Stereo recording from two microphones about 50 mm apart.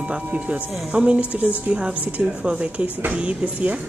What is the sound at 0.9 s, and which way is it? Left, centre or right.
A woman's voice, right.